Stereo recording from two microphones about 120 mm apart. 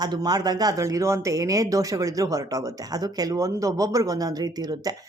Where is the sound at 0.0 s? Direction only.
35° right (ahead or behind).